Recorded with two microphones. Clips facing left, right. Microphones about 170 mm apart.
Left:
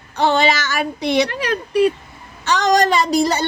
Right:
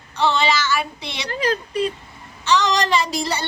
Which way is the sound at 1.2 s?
65° left (ahead or behind).